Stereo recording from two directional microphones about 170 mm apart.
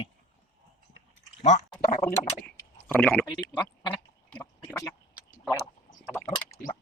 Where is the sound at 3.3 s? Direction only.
25° left (ahead or behind).